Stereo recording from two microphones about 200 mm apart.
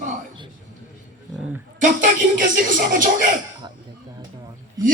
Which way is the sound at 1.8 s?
40° right (ahead or behind).